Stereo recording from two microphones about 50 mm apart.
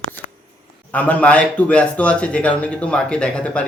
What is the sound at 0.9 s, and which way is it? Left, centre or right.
Speech, left.